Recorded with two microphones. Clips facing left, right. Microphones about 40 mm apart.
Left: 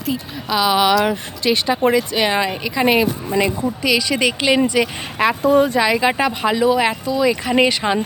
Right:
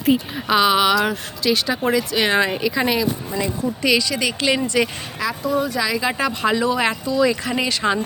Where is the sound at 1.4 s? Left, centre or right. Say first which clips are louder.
Left 3 dB; left.